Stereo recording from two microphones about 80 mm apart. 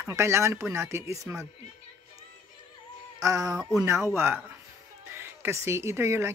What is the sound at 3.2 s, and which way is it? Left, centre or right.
Speech, right.